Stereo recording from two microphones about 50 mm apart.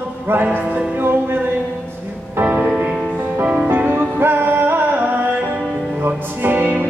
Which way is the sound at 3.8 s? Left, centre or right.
Right.